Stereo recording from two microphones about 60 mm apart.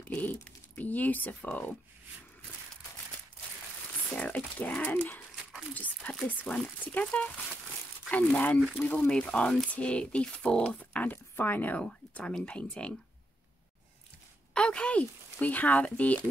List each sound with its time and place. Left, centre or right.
0.1 s speech: left
4.1 s speech: left
5.3 s a sound: centre
6.2 s speech: left
10.8 s speech: left
14.5 s speech: centre